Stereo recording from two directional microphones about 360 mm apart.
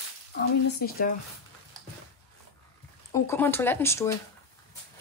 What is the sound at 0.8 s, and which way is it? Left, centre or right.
Speech, left.